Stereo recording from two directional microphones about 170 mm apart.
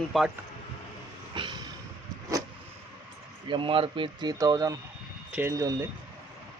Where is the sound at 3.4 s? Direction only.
30° right (ahead or behind).